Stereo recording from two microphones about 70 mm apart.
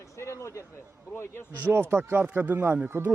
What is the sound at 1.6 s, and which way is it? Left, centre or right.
Speech, right.